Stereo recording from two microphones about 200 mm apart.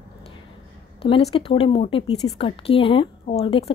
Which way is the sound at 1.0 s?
25° left (ahead or behind).